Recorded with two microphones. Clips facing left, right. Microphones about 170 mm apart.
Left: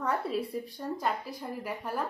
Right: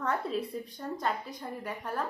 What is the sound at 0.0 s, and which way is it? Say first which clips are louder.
A woman's voice: left 1 dB; 5° left (ahead or behind).